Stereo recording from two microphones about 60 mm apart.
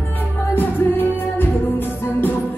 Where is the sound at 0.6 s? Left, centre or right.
Left.